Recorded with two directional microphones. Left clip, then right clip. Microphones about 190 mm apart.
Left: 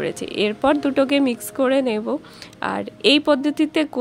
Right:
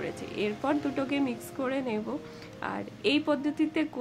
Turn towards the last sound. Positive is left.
turn(degrees=45)  # may be behind; listen again after turning